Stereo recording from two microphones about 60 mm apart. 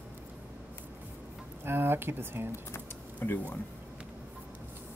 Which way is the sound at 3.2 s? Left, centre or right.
Left.